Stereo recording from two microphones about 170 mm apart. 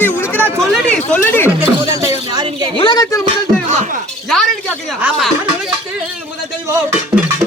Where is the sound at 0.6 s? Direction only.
5° left (ahead or behind).